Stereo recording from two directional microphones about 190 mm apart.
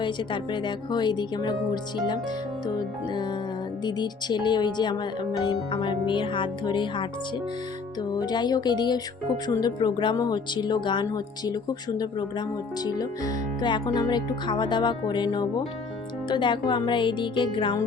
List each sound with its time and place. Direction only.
0.5 s speech: 25° left (ahead or behind)
3.8 s speech: 20° left (ahead or behind)
8.1 s speech: 20° left (ahead or behind)
12.8 s speech: 20° left (ahead or behind)